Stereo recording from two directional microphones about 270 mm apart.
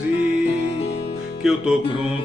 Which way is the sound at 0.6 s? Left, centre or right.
Left.